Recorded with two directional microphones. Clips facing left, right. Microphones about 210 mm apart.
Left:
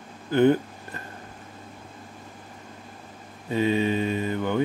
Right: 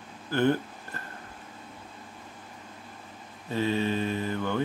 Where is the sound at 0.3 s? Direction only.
15° left (ahead or behind).